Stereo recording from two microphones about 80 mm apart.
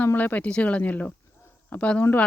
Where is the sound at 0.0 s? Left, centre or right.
Left.